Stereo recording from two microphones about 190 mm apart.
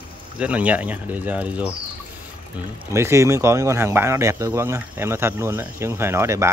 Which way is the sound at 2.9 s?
15° right (ahead or behind).